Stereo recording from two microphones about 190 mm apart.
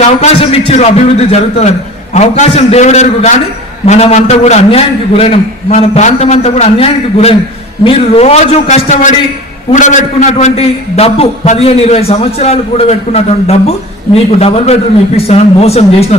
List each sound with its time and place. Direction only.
0.2 s a man's voice: 30° left (ahead or behind)